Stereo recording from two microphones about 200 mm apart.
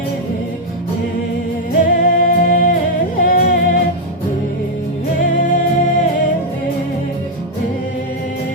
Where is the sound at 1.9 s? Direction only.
45° left (ahead or behind).